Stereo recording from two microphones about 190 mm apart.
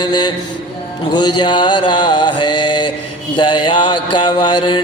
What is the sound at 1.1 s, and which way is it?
Mantra, 20° left (ahead or behind).